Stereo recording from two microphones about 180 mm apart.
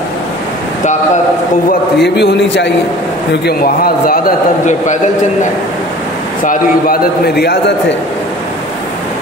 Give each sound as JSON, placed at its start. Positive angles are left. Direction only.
{"t": 1.7, "sound": "a man's voice", "side_deg": 65}
{"t": 3.4, "sound": "a man's voice", "side_deg": 55}
{"t": 6.4, "sound": "a man's voice", "side_deg": 60}